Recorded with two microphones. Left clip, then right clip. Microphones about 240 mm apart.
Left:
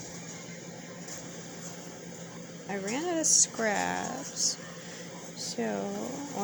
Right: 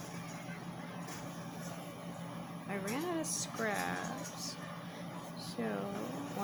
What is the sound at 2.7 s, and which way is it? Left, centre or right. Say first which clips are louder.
Speech: left 6 dB; left.